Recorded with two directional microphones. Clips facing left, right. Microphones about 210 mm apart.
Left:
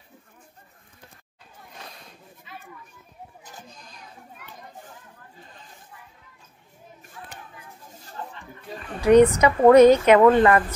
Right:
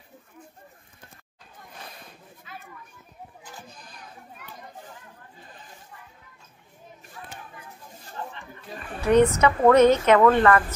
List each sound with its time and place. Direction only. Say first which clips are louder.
9.0 s a woman's voice: left 4 dB; 15° left (ahead or behind)